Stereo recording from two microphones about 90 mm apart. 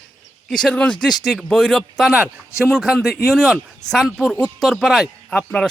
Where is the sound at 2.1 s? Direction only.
15° right (ahead or behind).